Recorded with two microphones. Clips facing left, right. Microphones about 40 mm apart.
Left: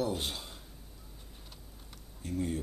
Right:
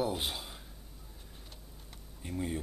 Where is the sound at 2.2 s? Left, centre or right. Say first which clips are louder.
Left 2 dB; centre.